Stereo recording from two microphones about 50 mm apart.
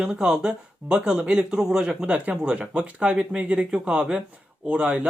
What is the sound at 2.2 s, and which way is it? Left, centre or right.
Speech, right.